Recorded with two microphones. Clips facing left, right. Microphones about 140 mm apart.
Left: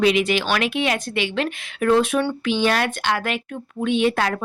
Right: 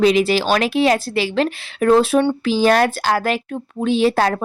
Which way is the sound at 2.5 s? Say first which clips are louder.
Right 6 dB; 40° right (ahead or behind).